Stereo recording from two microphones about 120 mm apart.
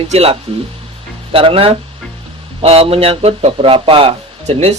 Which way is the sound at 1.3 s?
50° right (ahead or behind).